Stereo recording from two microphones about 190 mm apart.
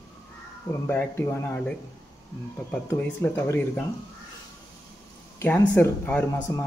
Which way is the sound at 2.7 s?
10° left (ahead or behind).